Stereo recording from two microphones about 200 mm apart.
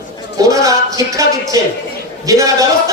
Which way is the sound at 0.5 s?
15° right (ahead or behind).